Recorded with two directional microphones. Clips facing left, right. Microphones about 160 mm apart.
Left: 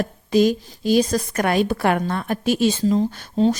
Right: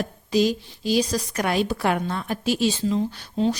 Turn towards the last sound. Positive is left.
turn(degrees=40)  # may be behind; listen again after turning